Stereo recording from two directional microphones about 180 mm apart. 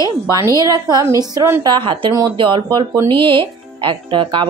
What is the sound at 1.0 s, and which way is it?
Speech, 20° right (ahead or behind).